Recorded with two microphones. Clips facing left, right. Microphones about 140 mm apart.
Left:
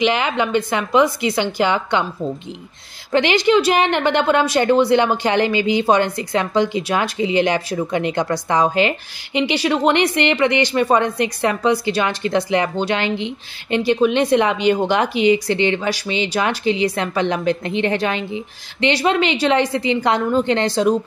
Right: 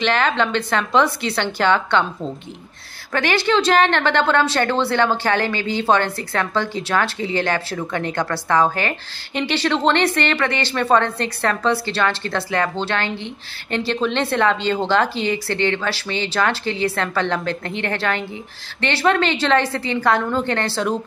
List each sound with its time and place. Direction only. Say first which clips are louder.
0.0 s a woman's voice: left 1 dB; 15° left (ahead or behind)
3.1 s a woman's voice: left 4 dB; 15° left (ahead or behind)